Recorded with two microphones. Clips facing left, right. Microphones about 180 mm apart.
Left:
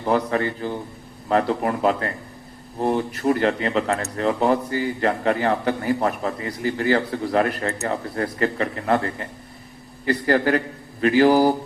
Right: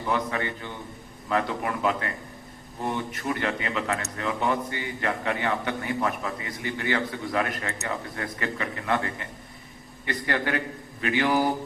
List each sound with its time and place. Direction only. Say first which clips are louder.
0.0 s speech: left 7 dB; 40° left (ahead or behind)